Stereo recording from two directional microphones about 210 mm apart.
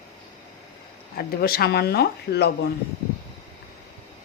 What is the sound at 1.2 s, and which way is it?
Speech, 45° left (ahead or behind).